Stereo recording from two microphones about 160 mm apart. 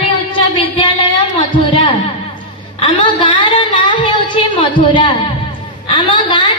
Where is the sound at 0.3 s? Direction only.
35° left (ahead or behind).